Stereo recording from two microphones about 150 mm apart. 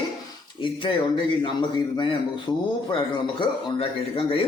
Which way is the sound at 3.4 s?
35° left (ahead or behind).